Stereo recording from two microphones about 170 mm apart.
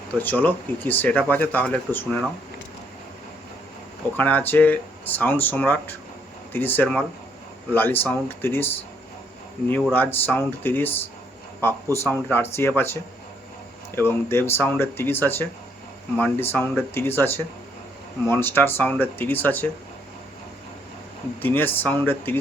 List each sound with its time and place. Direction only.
0.2 s speech: 10° left (ahead or behind)
4.2 s speech: 10° left (ahead or behind)
9.9 s speech: 10° left (ahead or behind)
21.4 s speech: 10° left (ahead or behind)